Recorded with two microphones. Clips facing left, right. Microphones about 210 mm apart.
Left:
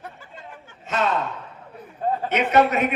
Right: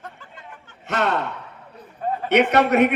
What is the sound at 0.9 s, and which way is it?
Speech, 65° right (ahead or behind).